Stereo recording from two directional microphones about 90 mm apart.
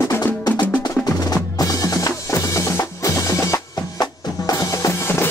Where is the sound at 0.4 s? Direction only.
50° left (ahead or behind).